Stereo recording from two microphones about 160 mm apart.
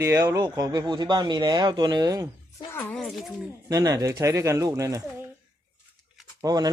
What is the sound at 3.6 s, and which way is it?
Speech, 25° right (ahead or behind).